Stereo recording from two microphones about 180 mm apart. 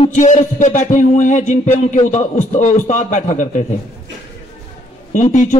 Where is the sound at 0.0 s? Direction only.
45° left (ahead or behind).